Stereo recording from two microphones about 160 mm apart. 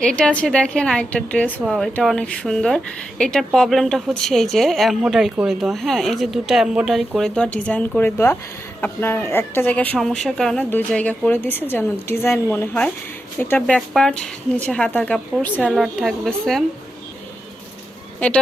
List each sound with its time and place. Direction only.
0.0 s a woman's voice: 5° left (ahead or behind)